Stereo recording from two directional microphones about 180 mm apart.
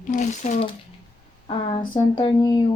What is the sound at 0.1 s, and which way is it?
Speech, 45° left (ahead or behind).